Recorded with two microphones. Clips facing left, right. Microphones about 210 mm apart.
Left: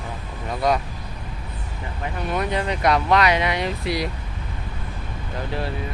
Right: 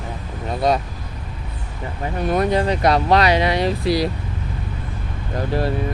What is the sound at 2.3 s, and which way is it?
Speech, 40° right (ahead or behind).